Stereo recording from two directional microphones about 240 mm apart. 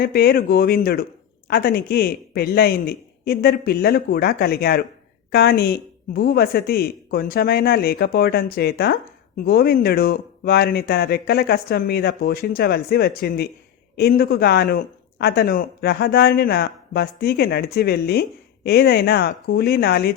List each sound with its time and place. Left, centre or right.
0.0 s speech: left